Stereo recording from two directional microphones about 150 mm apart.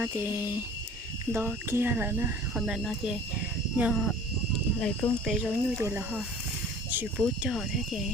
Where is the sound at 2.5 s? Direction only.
5° right (ahead or behind).